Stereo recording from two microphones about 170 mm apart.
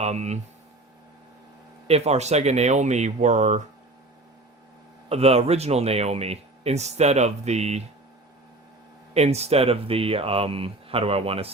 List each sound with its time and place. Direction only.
0.0 s speech: 40° right (ahead or behind)
1.9 s speech: 40° right (ahead or behind)
5.0 s speech: 35° right (ahead or behind)
9.1 s speech: 40° right (ahead or behind)